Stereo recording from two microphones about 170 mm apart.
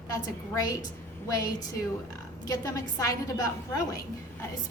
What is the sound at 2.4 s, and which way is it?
Speech, 20° left (ahead or behind).